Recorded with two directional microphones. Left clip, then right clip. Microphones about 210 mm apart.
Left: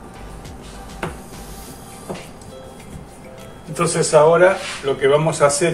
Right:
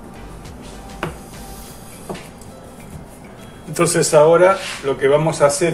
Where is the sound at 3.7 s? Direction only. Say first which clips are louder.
Right 1 dB; 35° right (ahead or behind).